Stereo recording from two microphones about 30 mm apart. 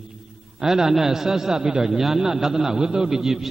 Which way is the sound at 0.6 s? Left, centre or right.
Centre.